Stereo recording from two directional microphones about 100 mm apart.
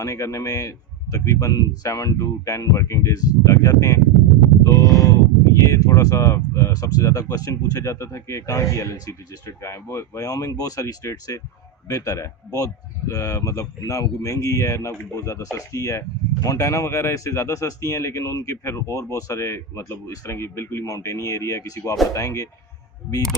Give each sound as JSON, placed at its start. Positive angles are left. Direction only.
{"t": 0.0, "sound": "speech", "side_deg": 35}
{"t": 4.9, "sound": "a sound", "side_deg": 35}
{"t": 5.5, "sound": "speech", "side_deg": 35}